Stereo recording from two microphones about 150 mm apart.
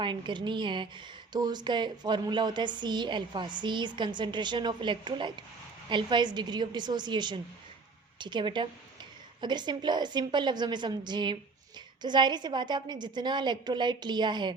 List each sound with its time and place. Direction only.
0.0 s a woman's voice: 30° right (ahead or behind)